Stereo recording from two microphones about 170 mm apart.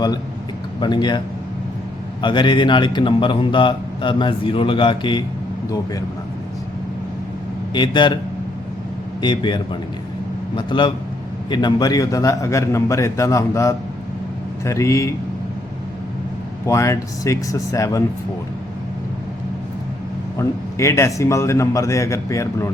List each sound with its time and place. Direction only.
0.8 s a man's voice: 25° left (ahead or behind)
2.2 s a man's voice: 25° left (ahead or behind)
7.7 s a man's voice: 25° left (ahead or behind)
9.2 s a man's voice: 25° left (ahead or behind)
16.6 s a man's voice: 15° left (ahead or behind)
20.4 s a man's voice: 15° left (ahead or behind)